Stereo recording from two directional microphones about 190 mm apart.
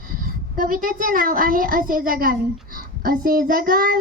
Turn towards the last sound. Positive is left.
turn(degrees=-50)  # may be behind; listen again after turning